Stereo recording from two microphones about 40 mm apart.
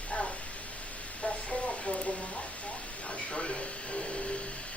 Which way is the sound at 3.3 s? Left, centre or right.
Left.